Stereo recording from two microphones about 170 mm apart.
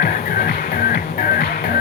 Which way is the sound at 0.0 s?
60° left (ahead or behind).